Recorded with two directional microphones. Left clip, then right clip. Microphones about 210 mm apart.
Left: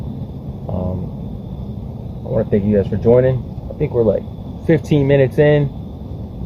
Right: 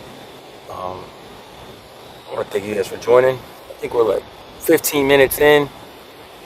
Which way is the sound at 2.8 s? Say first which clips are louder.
Right 1 dB; 40° right (ahead or behind).